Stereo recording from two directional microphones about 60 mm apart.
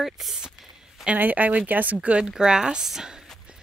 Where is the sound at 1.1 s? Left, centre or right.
Right; by 3.2 s centre.